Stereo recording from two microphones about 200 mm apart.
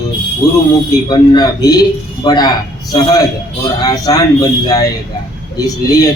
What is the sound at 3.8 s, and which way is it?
A man's voice, 20° left (ahead or behind).